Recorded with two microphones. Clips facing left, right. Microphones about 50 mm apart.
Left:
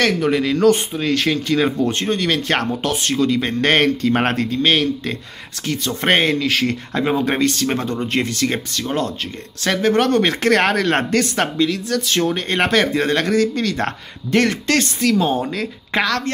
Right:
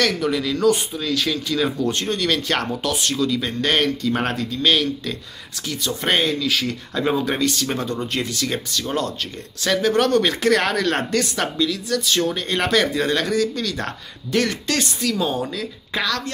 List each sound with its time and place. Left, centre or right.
0.0 s speech: left
7.0 s speech: left
7.3 s speech: left